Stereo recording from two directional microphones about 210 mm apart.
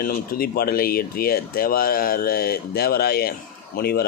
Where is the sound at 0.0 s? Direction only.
45° left (ahead or behind).